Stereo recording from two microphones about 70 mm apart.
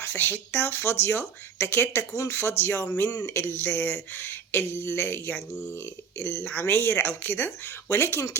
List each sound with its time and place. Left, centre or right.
0.0 s speech: left
6.4 s speech: centre
6.7 s speech: left